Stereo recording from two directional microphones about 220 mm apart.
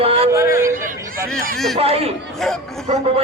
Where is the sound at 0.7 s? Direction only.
40° right (ahead or behind).